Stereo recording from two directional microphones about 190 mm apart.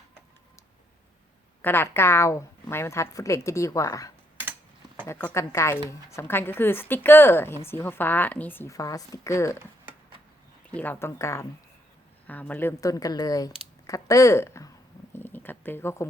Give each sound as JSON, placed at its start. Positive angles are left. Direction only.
{"t": 1.6, "sound": "a woman's voice", "side_deg": 10}
{"t": 10.7, "sound": "a woman's voice", "side_deg": 10}
{"t": 15.1, "sound": "a sound", "side_deg": 10}